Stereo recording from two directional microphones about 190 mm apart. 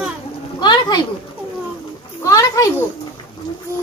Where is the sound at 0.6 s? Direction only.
20° left (ahead or behind).